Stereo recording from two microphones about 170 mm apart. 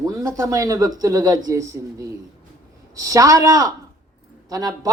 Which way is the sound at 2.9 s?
20° right (ahead or behind).